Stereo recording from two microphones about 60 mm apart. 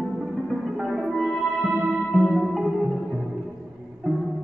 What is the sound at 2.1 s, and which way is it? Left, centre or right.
Music, centre.